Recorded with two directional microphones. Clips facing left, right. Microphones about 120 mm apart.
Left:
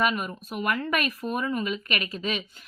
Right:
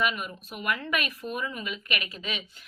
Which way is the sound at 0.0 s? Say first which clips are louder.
Left 3 dB; 40° left (ahead or behind).